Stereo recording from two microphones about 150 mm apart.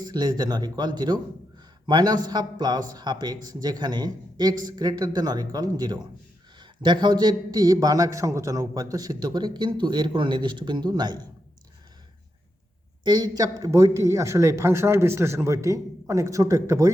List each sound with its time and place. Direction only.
0.0 s a man's voice: 25° right (ahead or behind)
13.1 s a man's voice: 25° right (ahead or behind)